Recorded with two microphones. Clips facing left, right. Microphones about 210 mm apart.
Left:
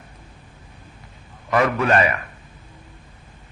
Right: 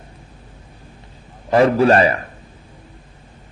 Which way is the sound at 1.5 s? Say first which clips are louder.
Right 6 dB; 30° right (ahead or behind).